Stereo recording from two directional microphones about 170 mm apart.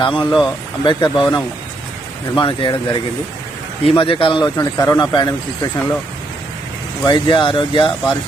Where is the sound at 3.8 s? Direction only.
30° left (ahead or behind).